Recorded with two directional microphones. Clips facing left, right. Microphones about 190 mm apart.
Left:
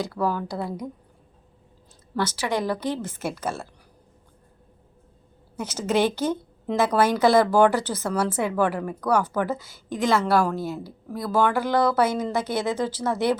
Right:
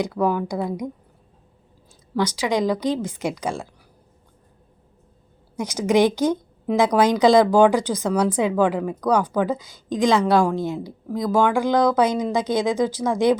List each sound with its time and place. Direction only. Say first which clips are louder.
0.0 s a woman's voice: right 4 dB; 15° right (ahead or behind)
2.1 s a woman's voice: right 4 dB; 15° right (ahead or behind)
5.5 s a woman's voice: right 5 dB; 15° right (ahead or behind)